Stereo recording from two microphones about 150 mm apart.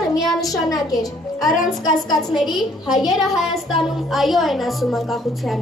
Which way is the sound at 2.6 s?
Centre (ahead or behind).